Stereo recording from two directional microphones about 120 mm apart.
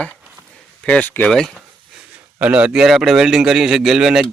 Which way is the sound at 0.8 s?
10° left (ahead or behind).